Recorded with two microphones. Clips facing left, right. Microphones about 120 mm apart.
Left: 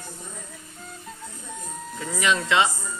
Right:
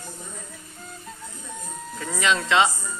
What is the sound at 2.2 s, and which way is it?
Speech, 25° right (ahead or behind).